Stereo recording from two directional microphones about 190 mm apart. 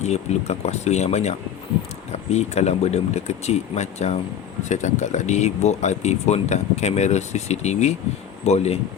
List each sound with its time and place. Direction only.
0.0 s speech: 35° left (ahead or behind)